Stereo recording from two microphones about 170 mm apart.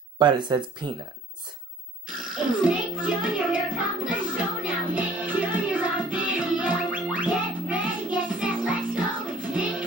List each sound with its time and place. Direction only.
0.2 s speech: 25° right (ahead or behind)
2.3 s music: 5° right (ahead or behind)